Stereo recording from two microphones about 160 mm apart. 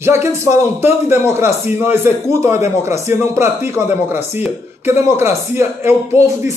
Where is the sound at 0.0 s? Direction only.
15° right (ahead or behind).